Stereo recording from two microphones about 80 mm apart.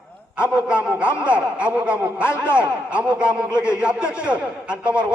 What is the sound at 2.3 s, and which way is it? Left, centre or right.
Speech, left.